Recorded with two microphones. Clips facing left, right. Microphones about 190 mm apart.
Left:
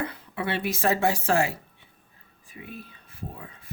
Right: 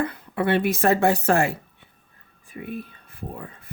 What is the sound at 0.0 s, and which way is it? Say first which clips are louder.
A woman's voice: right 6 dB; 50° right (ahead or behind).